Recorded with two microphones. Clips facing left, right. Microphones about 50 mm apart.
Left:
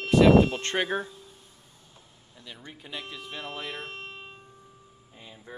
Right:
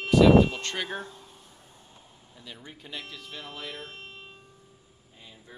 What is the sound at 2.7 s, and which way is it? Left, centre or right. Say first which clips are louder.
Speech: left 3 dB; centre.